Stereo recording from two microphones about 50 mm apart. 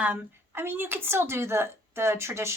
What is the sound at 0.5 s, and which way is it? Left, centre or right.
A woman's voice, right.